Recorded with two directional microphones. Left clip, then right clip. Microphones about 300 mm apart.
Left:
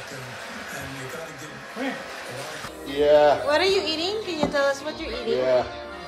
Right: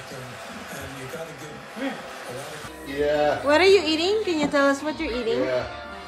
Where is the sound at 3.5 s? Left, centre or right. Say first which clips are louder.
Right 4 dB; right.